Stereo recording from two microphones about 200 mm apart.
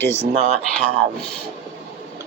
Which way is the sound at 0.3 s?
35° right (ahead or behind).